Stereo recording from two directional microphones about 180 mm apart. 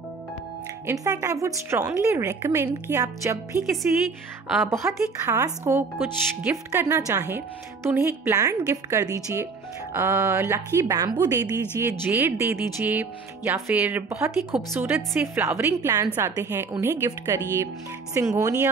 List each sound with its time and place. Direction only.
0.8 s a woman's voice: 15° right (ahead or behind)
3.6 s speech: centre (ahead or behind)
4.6 s a woman's voice: 15° right (ahead or behind)